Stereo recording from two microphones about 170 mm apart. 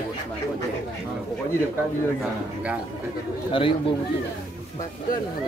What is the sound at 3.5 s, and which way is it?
Speech, 30° left (ahead or behind).